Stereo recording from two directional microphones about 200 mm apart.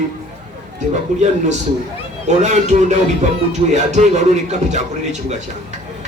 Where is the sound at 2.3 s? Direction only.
35° right (ahead or behind).